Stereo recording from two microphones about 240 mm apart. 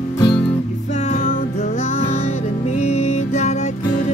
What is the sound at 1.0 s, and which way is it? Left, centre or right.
Music, left.